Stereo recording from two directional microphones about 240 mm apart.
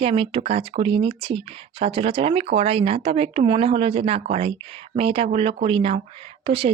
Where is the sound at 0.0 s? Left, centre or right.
Right.